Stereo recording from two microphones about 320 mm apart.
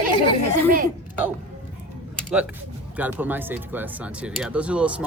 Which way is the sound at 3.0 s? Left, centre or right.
Centre.